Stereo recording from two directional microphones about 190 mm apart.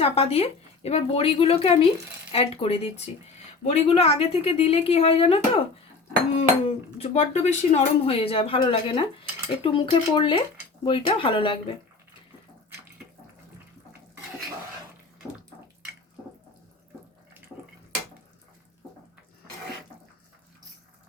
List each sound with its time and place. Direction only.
0.0 s a woman's voice: 30° left (ahead or behind)
6.7 s speech: 35° left (ahead or behind)